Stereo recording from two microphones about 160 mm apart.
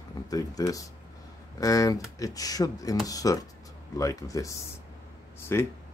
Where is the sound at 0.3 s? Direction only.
20° left (ahead or behind).